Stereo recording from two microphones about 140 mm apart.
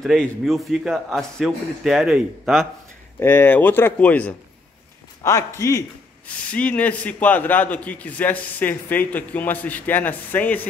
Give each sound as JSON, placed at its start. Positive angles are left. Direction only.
{"t": 0.0, "sound": "a man's voice", "side_deg": 0}
{"t": 3.2, "sound": "a man's voice", "side_deg": 15}
{"t": 5.2, "sound": "a man's voice", "side_deg": 20}